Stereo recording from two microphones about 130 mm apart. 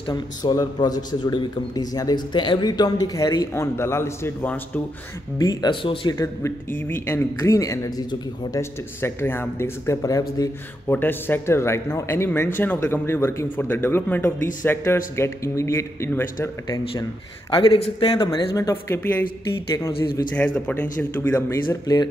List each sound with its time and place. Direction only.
0.0 s a man's voice: 35° left (ahead or behind); by 4.8 s 15° left (ahead or behind)
5.4 s speech: 30° left (ahead or behind)
6.1 s a man's voice: 25° left (ahead or behind)
17.5 s a man's voice: 40° left (ahead or behind)
18.5 s a man's voice: 25° left (ahead or behind)
19.7 s speech: 30° left (ahead or behind)
20.3 s speech: 10° left (ahead or behind)
21.6 s speech: 35° left (ahead or behind)